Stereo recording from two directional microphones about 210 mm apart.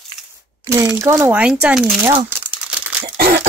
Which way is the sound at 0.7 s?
10° right (ahead or behind).